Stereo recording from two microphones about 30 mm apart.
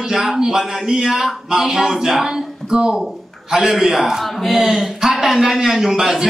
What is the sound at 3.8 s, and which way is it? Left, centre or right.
A woman's voice, centre.